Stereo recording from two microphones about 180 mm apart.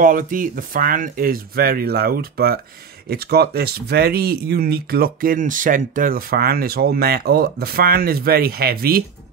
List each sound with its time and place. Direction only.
0.0 s speech: 50° right (ahead or behind)